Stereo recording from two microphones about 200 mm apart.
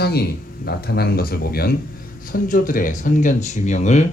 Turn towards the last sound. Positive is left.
turn(degrees=35)  # may be behind; listen again after turning